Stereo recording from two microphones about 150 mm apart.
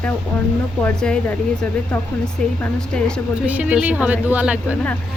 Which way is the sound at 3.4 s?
10° right (ahead or behind).